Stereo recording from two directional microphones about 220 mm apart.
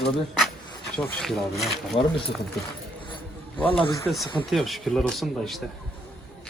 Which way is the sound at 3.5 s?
25° left (ahead or behind).